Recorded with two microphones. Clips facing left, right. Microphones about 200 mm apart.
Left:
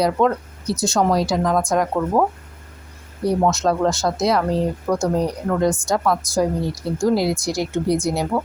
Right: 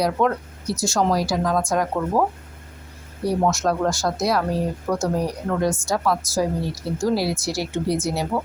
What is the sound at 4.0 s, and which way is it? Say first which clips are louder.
Speech: left 3 dB; 20° left (ahead or behind).